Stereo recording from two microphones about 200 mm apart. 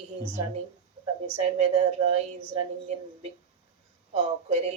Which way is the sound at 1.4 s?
35° right (ahead or behind).